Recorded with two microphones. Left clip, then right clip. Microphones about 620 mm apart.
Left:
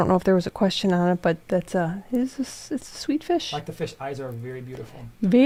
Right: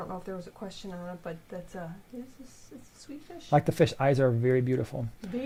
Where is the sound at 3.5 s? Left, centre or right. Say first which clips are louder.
Right 6 dB; right.